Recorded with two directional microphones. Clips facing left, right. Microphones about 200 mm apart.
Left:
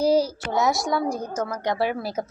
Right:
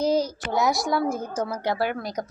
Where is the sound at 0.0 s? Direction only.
10° left (ahead or behind).